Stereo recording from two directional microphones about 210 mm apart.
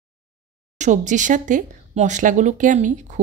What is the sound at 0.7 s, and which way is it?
Speech, 35° right (ahead or behind).